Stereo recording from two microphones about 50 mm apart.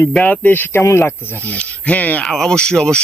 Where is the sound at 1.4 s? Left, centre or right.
Left.